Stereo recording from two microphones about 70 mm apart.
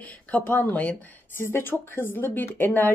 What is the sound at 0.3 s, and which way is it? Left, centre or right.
Speech, left.